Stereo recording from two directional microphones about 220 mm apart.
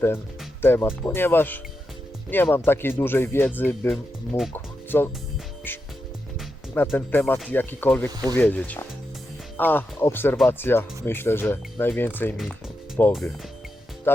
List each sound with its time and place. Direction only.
0.6 s speech: 10° left (ahead or behind)
4.5 s music: 10° left (ahead or behind)
5.7 s speech: 10° left (ahead or behind)
6.9 s speech: 10° left (ahead or behind)
8.1 s speech: 15° right (ahead or behind)
8.4 s speech: 5° left (ahead or behind)